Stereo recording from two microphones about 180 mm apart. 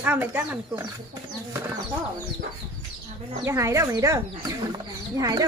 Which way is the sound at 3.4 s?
15° right (ahead or behind).